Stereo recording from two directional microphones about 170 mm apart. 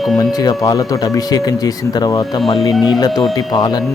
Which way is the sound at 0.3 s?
20° left (ahead or behind).